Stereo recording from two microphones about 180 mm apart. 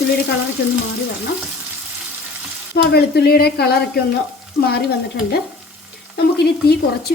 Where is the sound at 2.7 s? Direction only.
65° left (ahead or behind).